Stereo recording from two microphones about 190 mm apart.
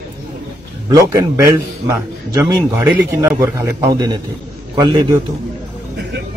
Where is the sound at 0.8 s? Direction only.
15° right (ahead or behind).